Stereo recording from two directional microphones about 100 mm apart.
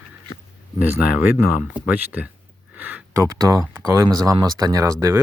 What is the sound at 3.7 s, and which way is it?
Speech, 25° right (ahead or behind).